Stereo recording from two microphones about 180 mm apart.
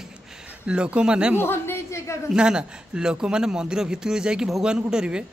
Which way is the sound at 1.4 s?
15° left (ahead or behind).